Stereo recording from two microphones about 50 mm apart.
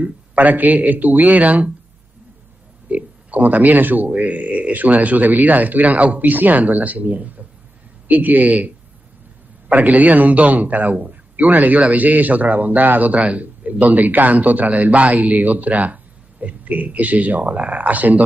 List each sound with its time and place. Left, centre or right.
0.0 s a man's voice: right
2.9 s a sound: right
4.1 s a man's voice: right